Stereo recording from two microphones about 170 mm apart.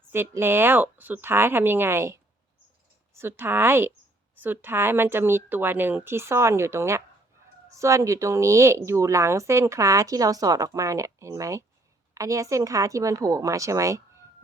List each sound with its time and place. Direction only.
0.1 s a woman's voice: 15° right (ahead or behind)